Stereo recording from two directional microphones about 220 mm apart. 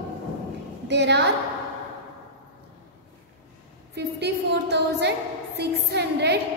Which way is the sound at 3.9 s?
50° right (ahead or behind).